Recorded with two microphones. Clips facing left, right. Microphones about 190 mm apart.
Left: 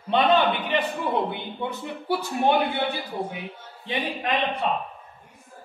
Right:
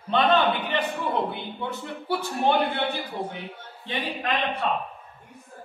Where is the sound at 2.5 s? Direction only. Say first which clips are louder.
Left 1 dB; 5° left (ahead or behind).